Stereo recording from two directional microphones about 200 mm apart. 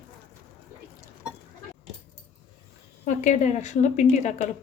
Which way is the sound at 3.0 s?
35° left (ahead or behind).